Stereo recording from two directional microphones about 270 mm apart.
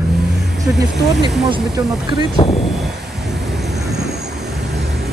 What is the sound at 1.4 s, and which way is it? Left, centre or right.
Speech, centre.